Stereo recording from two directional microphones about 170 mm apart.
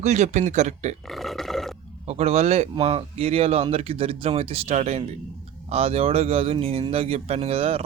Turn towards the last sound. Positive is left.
turn(degrees=-35)  # may be behind; listen again after turning